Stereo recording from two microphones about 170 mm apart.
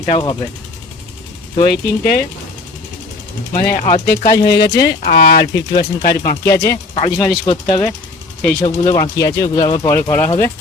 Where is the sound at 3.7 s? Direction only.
45° left (ahead or behind).